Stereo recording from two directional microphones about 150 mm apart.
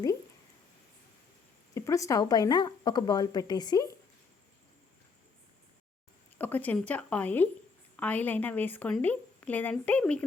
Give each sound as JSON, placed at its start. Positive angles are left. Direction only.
{"t": 1.7, "sound": "speech", "side_deg": 20}
{"t": 6.4, "sound": "a woman's voice", "side_deg": 10}